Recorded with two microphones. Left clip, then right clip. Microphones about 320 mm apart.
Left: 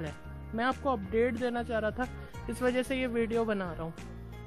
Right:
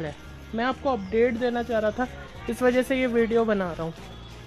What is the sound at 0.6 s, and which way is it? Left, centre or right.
Speech, left.